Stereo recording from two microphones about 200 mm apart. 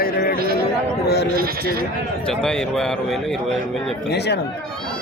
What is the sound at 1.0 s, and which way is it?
Speech, 55° left (ahead or behind).